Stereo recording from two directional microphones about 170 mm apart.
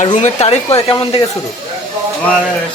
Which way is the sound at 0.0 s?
45° left (ahead or behind).